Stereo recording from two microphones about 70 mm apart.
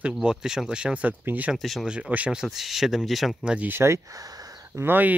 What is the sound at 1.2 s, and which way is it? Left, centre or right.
Speech, right.